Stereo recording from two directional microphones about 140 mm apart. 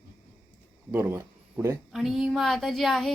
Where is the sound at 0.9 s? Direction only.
20° right (ahead or behind).